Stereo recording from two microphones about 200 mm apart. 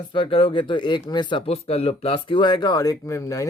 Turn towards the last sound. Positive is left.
turn(degrees=15)  # may be behind; listen again after turning